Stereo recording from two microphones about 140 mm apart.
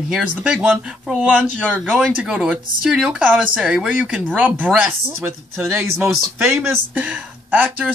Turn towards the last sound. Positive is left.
turn(degrees=-10)  # may be behind; listen again after turning